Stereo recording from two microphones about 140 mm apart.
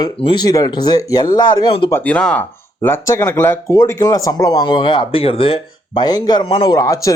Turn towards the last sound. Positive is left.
turn(degrees=25)  # may be behind; listen again after turning